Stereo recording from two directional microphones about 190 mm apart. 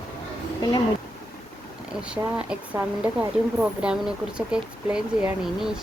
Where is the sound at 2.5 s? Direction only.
5° right (ahead or behind).